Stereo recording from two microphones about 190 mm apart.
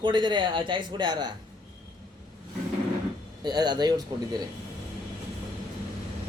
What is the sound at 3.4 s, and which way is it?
Speech, 20° right (ahead or behind).